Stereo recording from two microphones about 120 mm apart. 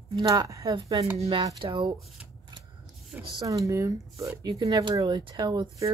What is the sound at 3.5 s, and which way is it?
Speech, 25° right (ahead or behind).